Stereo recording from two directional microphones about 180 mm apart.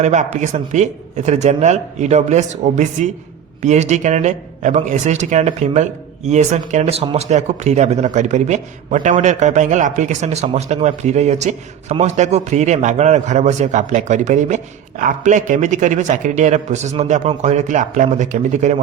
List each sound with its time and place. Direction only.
0.0 s a man's voice: 40° right (ahead or behind)